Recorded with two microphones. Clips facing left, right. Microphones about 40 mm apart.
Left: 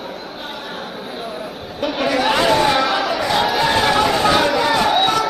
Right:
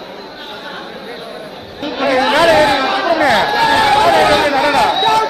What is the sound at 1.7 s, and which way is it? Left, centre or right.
Chatter, right.